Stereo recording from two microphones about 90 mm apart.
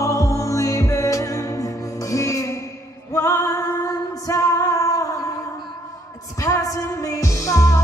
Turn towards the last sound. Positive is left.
turn(degrees=35)  # may be behind; listen again after turning